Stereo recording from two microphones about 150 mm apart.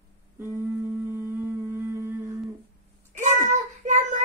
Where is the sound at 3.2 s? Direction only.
55° right (ahead or behind).